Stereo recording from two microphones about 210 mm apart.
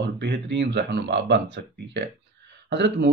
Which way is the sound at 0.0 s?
55° right (ahead or behind).